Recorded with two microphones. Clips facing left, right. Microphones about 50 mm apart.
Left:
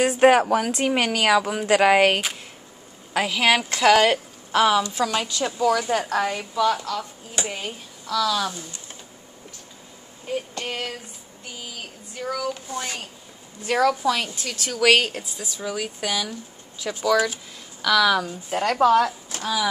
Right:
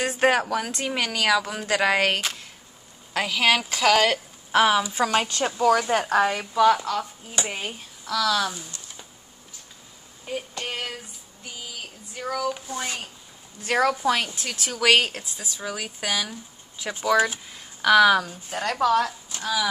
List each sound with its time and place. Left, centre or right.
0.0 s speech: centre
4.5 s a woman's voice: centre
5.0 s a woman's voice: right; by 7.7 s centre
8.1 s a sound: centre
10.2 s a sound: centre
12.2 s a woman's voice: centre
17.0 s speech: right
18.6 s a woman's voice: left